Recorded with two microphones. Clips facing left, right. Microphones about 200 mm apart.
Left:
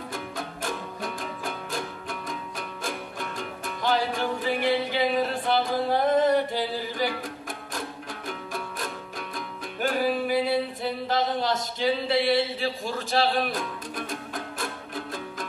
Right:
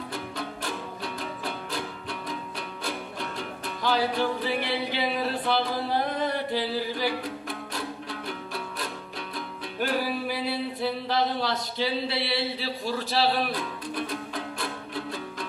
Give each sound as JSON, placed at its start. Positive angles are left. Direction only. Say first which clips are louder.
{"t": 0.1, "sound": "music", "louder": "even", "side_deg": 45}